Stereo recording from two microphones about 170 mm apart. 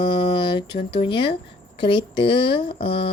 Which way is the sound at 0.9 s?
30° left (ahead or behind).